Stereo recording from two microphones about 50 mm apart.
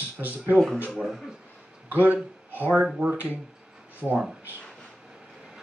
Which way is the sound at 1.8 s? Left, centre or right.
Right.